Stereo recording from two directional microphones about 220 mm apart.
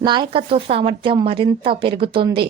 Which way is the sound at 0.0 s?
20° right (ahead or behind).